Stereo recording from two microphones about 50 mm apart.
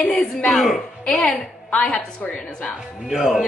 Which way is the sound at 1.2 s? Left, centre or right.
Left.